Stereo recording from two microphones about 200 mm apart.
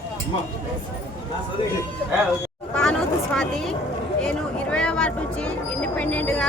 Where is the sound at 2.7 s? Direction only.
5° left (ahead or behind).